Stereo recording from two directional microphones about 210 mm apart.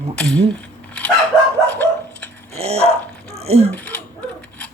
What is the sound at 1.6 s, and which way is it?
Dog, 10° left (ahead or behind).